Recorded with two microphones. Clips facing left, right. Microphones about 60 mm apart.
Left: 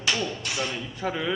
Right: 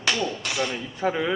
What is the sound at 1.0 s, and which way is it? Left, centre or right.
Speech, right.